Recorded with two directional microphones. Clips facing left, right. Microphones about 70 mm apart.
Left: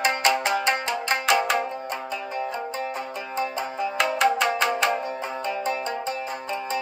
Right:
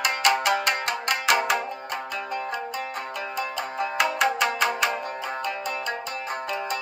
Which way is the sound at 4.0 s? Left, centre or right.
Centre.